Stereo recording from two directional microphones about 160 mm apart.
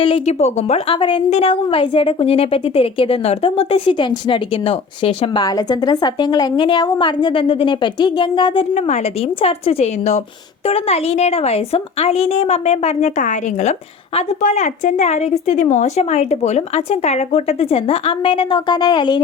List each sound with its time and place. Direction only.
0.0 s a woman's voice: 40° left (ahead or behind)
0.9 s a woman's voice: 30° left (ahead or behind)